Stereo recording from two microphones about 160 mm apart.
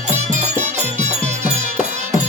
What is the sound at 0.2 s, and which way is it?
Music, 45° right (ahead or behind).